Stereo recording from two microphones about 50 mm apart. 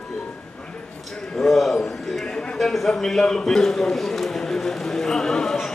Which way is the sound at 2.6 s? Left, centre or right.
Centre.